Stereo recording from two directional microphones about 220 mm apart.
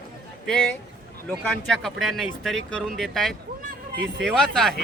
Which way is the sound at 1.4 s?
5° left (ahead or behind).